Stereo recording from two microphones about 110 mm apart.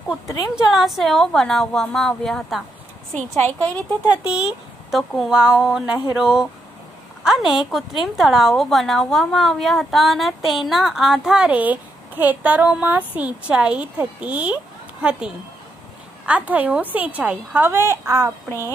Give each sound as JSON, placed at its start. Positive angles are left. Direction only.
{"t": 0.4, "sound": "a woman's voice", "side_deg": -5}
{"t": 3.2, "sound": "speech", "side_deg": 15}
{"t": 4.0, "sound": "a woman's voice", "side_deg": -10}
{"t": 17.6, "sound": "a woman's voice", "side_deg": -25}